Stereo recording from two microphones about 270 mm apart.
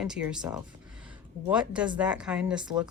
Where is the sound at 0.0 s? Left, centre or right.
Centre.